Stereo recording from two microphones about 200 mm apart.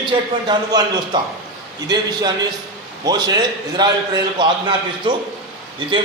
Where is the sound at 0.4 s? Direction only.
20° right (ahead or behind).